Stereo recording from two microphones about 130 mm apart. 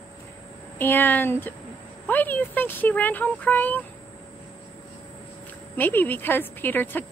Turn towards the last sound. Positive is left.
turn(degrees=15)  # may be behind; listen again after turning